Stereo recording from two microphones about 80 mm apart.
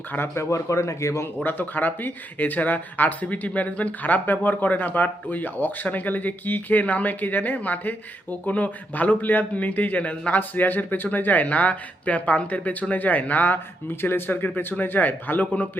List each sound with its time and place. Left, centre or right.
0.1 s speech: left
0.5 s speech: left
1.5 s speech: left